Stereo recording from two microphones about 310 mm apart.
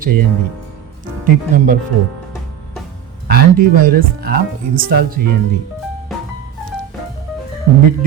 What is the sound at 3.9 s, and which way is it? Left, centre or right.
Speech, right.